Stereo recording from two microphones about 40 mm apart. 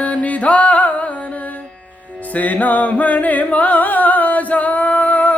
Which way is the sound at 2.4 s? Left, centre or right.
Left.